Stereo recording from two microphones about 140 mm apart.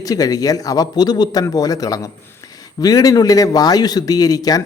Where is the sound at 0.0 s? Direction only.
25° left (ahead or behind).